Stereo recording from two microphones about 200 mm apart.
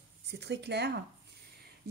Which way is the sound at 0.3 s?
60° right (ahead or behind).